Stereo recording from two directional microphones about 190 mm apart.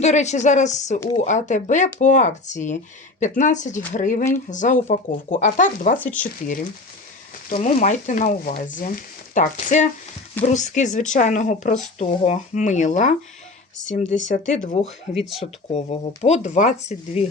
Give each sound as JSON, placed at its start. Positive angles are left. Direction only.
{"t": 0.0, "sound": "speech", "side_deg": 35}
{"t": 14.3, "sound": "speech", "side_deg": 40}